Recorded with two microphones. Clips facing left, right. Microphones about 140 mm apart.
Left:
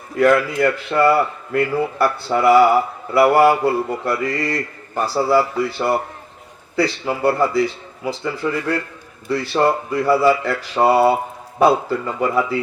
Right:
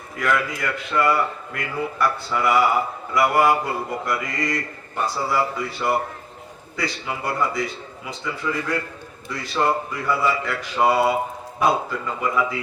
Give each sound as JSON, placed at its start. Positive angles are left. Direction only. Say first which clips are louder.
{"t": 0.2, "sound": "a man's voice", "louder": "left 9 dB", "side_deg": 35}
{"t": 6.7, "sound": "a man's voice", "louder": "left 8 dB", "side_deg": 35}